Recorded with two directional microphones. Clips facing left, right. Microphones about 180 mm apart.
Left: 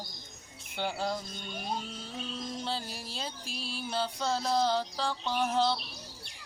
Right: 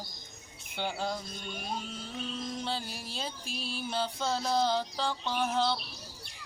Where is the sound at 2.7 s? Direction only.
15° right (ahead or behind).